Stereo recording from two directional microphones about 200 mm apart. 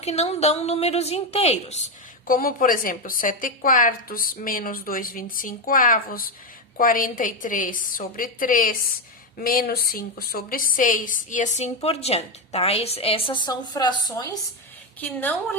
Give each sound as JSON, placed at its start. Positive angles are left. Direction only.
{"t": 0.0, "sound": "a woman's voice", "side_deg": 30}
{"t": 2.2, "sound": "a woman's voice", "side_deg": 45}
{"t": 15.0, "sound": "a woman's voice", "side_deg": 10}